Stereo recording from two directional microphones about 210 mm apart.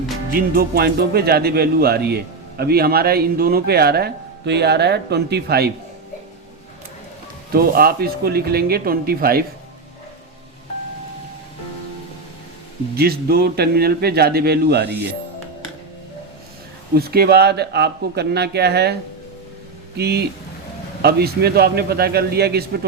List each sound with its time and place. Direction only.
0.3 s speech: 45° right (ahead or behind)
7.5 s speech: 45° right (ahead or behind)
13.0 s speech: 45° right (ahead or behind)
16.9 s speech: 45° right (ahead or behind)
20.0 s speech: 50° right (ahead or behind)